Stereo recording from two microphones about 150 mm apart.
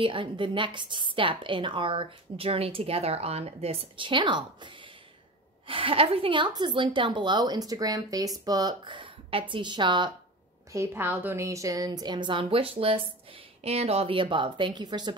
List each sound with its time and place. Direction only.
0.0 s a woman's voice: 35° right (ahead or behind)
10.7 s a woman's voice: 15° right (ahead or behind)